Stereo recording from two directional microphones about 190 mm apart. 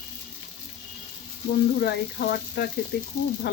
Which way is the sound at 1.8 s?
60° left (ahead or behind).